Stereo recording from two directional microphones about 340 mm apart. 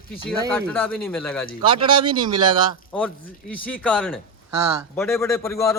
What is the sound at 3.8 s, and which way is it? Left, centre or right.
A man's voice, centre.